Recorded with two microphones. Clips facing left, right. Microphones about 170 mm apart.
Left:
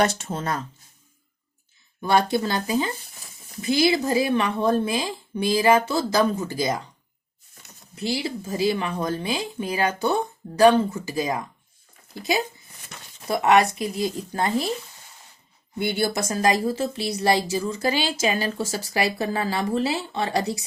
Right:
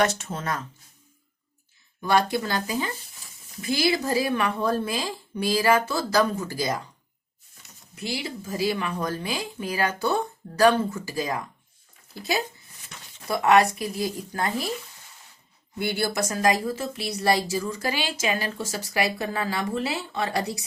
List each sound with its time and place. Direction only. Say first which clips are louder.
0.0 s speech: left 2 dB; 30° left (ahead or behind)
2.0 s a woman's voice: left 2 dB; 25° left (ahead or behind)
7.9 s a woman's voice: left 5 dB; 30° left (ahead or behind)
13.2 s a woman's voice: left 1 dB; 20° left (ahead or behind)
15.8 s a woman's voice: left 2 dB; 20° left (ahead or behind)